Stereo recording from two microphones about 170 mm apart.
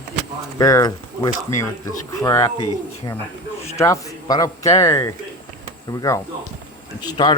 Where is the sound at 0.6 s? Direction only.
20° left (ahead or behind).